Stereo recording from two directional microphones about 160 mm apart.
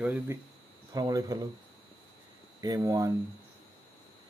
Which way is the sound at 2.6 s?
20° right (ahead or behind).